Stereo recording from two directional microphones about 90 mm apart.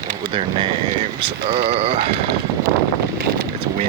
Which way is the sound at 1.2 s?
90° right.